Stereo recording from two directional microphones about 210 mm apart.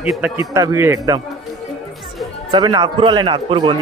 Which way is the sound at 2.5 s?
20° right (ahead or behind).